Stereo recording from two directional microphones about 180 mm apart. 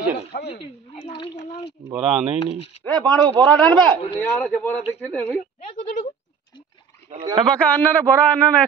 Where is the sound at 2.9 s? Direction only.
25° right (ahead or behind).